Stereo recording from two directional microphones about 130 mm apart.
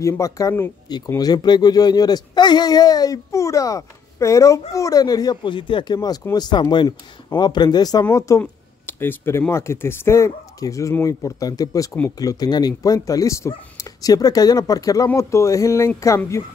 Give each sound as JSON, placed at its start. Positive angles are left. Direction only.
{"t": 0.0, "sound": "speech", "side_deg": 25}